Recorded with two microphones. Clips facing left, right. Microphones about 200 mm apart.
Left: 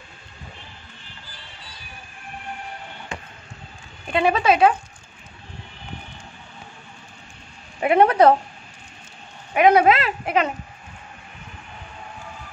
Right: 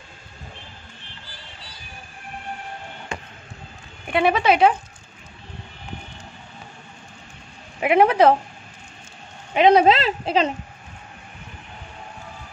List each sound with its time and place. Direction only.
4.1 s speech: 15° right (ahead or behind)
7.8 s speech: 15° right (ahead or behind)
9.5 s speech: 25° right (ahead or behind)